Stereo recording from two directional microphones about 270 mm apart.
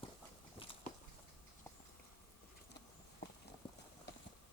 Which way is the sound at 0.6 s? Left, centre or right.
Centre.